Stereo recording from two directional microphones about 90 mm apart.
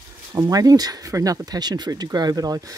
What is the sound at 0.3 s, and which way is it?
Speech, 40° right (ahead or behind).